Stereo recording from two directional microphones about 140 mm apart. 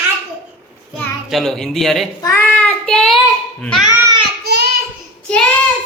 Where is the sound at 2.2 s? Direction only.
15° left (ahead or behind).